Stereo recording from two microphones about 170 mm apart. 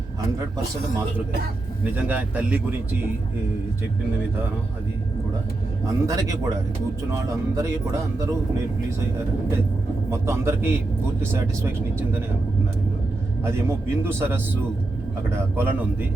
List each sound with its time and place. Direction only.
1.8 s a man's voice: 10° right (ahead or behind)
5.8 s a man's voice: 20° right (ahead or behind)
10.1 s a man's voice: 15° right (ahead or behind)
13.4 s a man's voice: 15° right (ahead or behind)